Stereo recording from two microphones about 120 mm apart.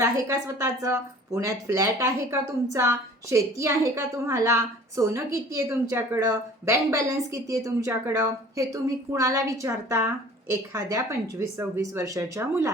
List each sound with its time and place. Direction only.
0.0 s speech: 25° right (ahead or behind)